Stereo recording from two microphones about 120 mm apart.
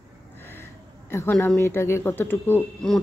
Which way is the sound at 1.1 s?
20° left (ahead or behind).